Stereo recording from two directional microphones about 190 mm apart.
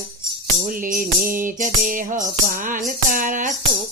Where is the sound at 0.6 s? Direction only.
45° right (ahead or behind).